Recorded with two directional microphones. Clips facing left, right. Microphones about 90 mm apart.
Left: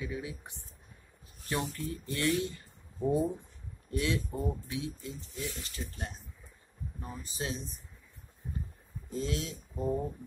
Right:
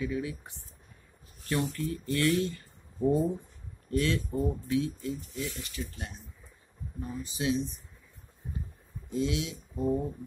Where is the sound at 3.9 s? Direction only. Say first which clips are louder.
Right 4 dB; 20° left (ahead or behind); by 7.6 s 40° left (ahead or behind).